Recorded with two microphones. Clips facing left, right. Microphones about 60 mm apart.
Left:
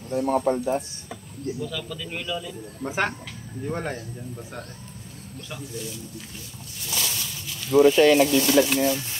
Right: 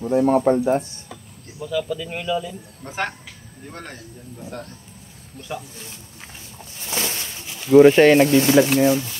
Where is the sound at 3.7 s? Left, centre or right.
Centre.